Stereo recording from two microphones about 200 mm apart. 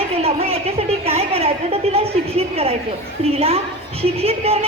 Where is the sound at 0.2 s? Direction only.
30° right (ahead or behind).